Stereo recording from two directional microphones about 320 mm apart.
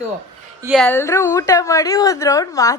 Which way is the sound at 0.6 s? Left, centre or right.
Centre.